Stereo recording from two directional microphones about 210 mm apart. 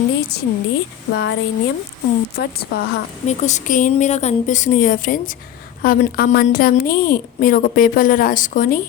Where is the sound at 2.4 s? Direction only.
50° left (ahead or behind).